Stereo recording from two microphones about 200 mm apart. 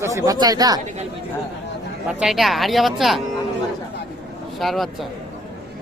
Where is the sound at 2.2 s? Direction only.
Centre (ahead or behind).